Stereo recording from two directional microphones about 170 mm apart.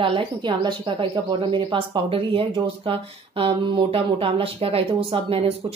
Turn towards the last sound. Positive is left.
turn(degrees=-35)  # may be behind; listen again after turning